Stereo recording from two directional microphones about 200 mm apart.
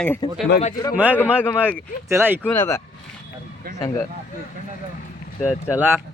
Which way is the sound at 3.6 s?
45° right (ahead or behind).